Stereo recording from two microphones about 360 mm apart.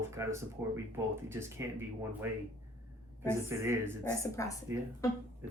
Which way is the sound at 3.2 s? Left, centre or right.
Centre.